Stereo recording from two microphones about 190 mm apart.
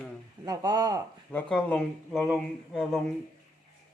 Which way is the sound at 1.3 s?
5° left (ahead or behind).